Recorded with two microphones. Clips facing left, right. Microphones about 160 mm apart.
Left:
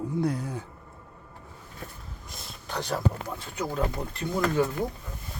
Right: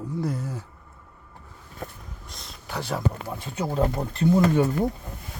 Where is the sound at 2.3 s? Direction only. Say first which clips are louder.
Left 2 dB; 5° left (ahead or behind).